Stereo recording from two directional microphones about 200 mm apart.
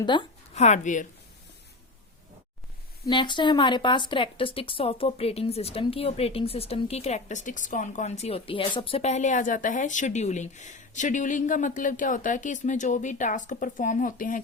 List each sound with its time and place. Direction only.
0.0 s a woman's voice: 25° left (ahead or behind)
3.1 s a woman's voice: 25° left (ahead or behind); by 14.4 s 40° left (ahead or behind)